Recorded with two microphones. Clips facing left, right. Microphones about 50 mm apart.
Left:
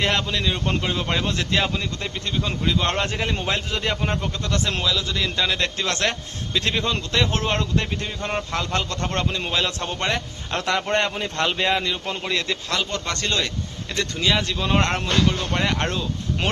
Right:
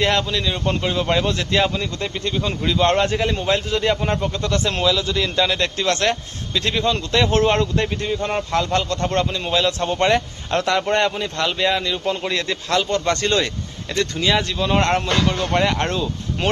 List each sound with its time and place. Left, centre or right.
0.0 s a man's voice: centre
7.1 s speech: centre
9.8 s speech: centre
10.5 s a man's voice: centre
12.2 s a man's voice: centre